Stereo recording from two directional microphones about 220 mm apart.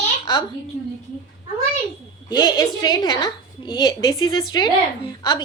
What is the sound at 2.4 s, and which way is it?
A woman's voice, 15° left (ahead or behind).